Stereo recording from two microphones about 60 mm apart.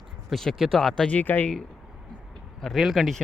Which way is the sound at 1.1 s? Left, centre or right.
Left.